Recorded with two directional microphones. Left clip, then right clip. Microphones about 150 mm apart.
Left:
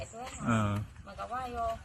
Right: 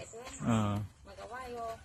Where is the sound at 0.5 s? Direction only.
15° right (ahead or behind).